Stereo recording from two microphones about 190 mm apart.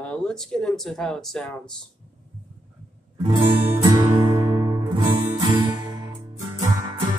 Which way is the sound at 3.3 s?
25° right (ahead or behind).